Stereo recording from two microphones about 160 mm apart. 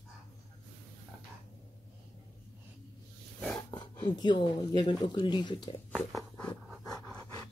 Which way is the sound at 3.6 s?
25° left (ahead or behind).